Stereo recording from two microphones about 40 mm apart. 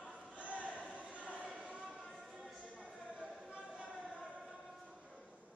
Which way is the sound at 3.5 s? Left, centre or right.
Right.